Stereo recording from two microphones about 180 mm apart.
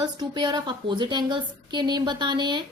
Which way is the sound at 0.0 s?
25° right (ahead or behind).